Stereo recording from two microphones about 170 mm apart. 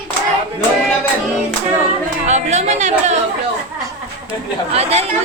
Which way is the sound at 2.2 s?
45° right (ahead or behind).